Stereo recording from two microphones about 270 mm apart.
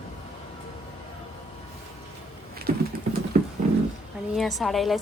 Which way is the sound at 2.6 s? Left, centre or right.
Right.